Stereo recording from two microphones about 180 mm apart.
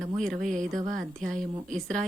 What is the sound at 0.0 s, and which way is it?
Speech, 5° left (ahead or behind).